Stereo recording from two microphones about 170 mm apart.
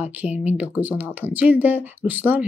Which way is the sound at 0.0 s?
10° right (ahead or behind).